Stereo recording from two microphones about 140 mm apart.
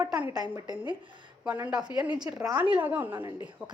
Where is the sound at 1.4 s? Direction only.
10° right (ahead or behind).